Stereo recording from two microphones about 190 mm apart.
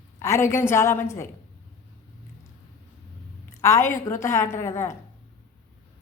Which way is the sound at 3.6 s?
15° left (ahead or behind).